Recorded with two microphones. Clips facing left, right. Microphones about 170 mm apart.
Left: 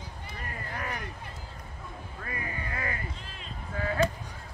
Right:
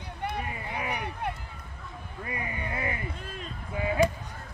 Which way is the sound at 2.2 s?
20° right (ahead or behind).